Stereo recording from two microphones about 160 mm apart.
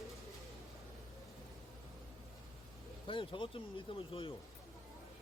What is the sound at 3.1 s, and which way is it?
Speech, 30° left (ahead or behind).